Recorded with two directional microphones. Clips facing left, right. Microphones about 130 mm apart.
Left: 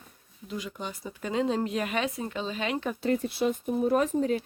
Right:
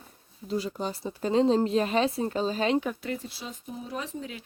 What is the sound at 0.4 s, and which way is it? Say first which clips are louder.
Speech: right 5 dB; 35° right (ahead or behind).